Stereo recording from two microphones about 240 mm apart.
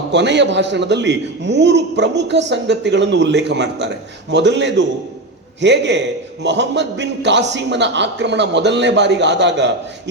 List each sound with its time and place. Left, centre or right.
0.1 s a man's voice: right